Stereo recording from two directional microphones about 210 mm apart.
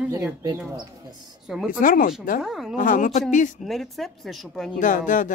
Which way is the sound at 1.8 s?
40° left (ahead or behind).